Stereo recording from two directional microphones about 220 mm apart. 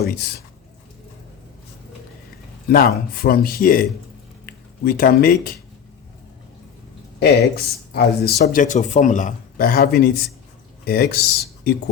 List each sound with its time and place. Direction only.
0.0 s speech: 45° left (ahead or behind)
2.6 s speech: 40° left (ahead or behind)
7.2 s speech: 45° left (ahead or behind)